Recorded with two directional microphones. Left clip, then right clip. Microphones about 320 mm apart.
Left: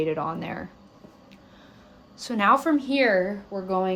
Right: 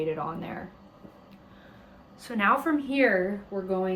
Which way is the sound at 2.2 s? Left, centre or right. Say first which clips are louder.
Left 4 dB; centre.